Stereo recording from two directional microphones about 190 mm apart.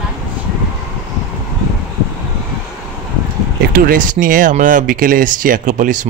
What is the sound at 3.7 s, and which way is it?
Speech, 45° right (ahead or behind).